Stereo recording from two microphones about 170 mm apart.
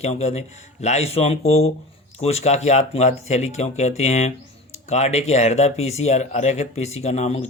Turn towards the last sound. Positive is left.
turn(degrees=40)  # may be behind; listen again after turning